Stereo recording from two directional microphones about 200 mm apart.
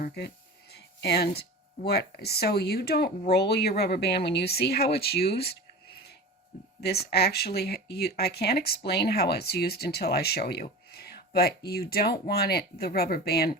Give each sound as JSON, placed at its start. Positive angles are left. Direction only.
{"t": 0.0, "sound": "speech", "side_deg": 50}
{"t": 6.8, "sound": "speech", "side_deg": 55}